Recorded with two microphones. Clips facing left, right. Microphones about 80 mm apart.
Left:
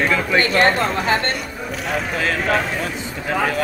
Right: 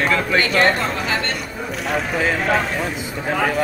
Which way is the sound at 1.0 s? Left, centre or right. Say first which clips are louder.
Left 3 dB; left.